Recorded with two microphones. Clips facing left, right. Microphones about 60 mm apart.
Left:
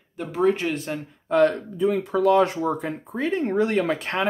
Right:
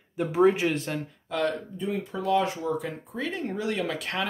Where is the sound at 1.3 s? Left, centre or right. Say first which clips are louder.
Left 9 dB; left.